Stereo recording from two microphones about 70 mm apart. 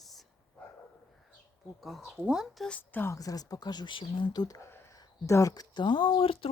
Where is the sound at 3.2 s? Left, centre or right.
Left.